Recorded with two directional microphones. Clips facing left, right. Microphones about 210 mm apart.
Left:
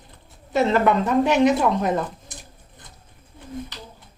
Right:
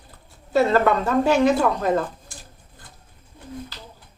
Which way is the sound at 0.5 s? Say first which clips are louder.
Right 1 dB; 20° left (ahead or behind).